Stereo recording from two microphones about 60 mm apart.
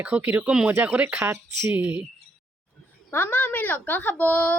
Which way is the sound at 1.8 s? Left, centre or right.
Right.